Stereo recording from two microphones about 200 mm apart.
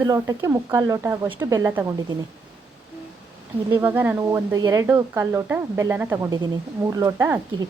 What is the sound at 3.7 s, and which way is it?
Speech, 10° right (ahead or behind).